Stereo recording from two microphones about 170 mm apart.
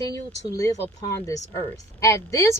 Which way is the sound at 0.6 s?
20° left (ahead or behind).